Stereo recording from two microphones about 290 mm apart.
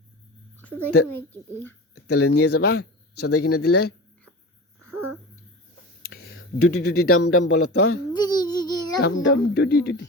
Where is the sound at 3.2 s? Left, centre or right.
Left.